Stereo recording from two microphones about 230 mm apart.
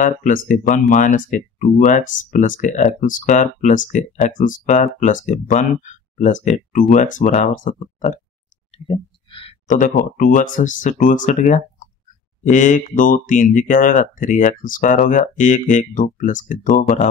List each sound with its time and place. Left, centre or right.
0.0 s speech: left